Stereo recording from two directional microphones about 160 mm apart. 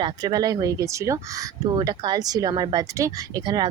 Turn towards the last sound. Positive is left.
turn(degrees=-25)  # may be behind; listen again after turning